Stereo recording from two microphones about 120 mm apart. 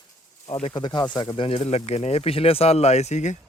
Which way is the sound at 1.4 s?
55° left (ahead or behind).